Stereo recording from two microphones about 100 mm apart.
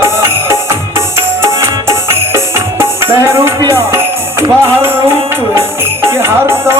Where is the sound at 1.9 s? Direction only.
25° right (ahead or behind).